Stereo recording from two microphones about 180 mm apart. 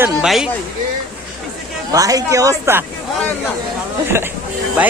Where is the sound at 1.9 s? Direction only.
20° right (ahead or behind).